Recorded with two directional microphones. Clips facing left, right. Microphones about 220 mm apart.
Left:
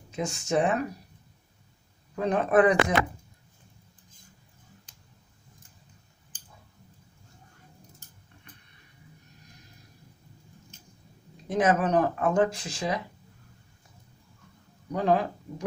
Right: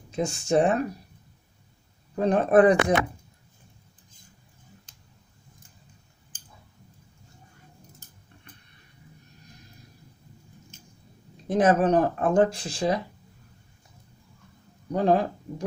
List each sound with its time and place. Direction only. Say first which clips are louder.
0.2 s speech: right 4 dB; 30° right (ahead or behind)
2.1 s speech: right 3 dB; 35° right (ahead or behind)
11.4 s speech: right 4 dB; 30° right (ahead or behind)
14.9 s speech: right 3 dB; 35° right (ahead or behind)